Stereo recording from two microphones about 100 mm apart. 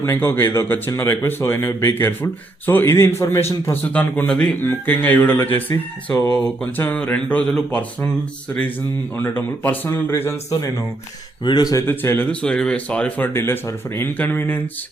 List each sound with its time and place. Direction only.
0.0 s speech: 25° left (ahead or behind)
3.9 s speech: 10° left (ahead or behind)
6.3 s speech: 5° left (ahead or behind)
9.1 s speech: 20° left (ahead or behind)
11.4 s speech: 50° left (ahead or behind)
11.7 s speech: 30° left (ahead or behind)